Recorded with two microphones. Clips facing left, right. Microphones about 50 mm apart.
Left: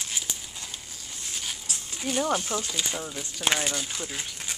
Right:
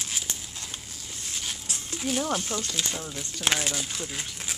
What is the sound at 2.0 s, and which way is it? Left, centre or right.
Speech, centre.